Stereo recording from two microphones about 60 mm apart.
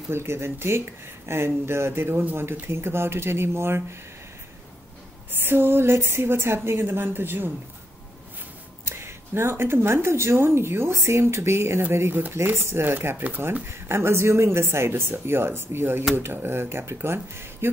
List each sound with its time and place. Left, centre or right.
0.1 s speech: right
5.4 s a woman's voice: right
8.8 s speech: right
12.1 s a woman's voice: right